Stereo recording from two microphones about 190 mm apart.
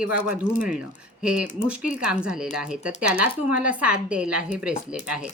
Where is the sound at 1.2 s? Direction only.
5° right (ahead or behind).